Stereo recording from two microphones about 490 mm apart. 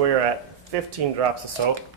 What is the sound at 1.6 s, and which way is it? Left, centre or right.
Speech, right.